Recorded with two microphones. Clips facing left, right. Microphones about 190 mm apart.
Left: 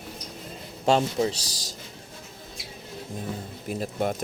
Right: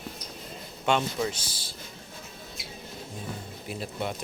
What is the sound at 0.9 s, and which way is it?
Speech, 35° left (ahead or behind).